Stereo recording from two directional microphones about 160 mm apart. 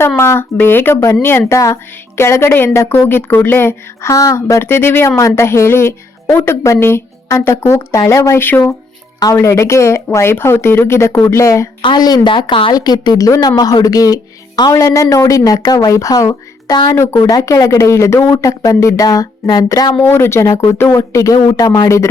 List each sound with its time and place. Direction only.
0.2 s speech: 15° left (ahead or behind)